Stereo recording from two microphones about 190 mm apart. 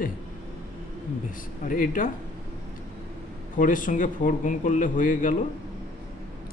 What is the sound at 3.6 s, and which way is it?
A man's voice, 45° left (ahead or behind).